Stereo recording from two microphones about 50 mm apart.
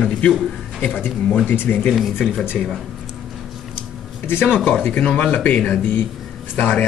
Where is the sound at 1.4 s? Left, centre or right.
Left.